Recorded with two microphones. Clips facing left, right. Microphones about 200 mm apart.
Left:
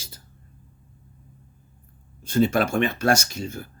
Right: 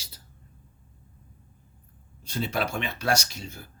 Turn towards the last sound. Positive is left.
turn(degrees=50)  # may be behind; listen again after turning